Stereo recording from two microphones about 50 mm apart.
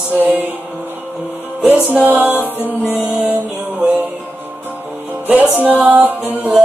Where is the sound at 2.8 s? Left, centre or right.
Left.